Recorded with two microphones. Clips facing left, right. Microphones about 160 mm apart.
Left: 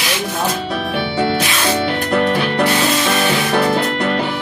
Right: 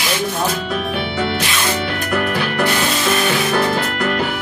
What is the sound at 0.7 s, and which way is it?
Music, 30° left (ahead or behind).